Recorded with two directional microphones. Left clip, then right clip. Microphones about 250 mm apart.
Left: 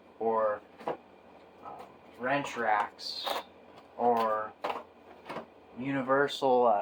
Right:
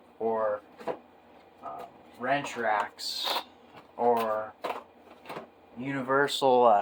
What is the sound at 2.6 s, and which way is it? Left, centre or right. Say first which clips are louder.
Speech: right 1 dB; right.